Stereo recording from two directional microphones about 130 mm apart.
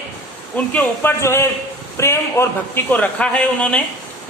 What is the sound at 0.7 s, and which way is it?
A man's voice, 15° left (ahead or behind).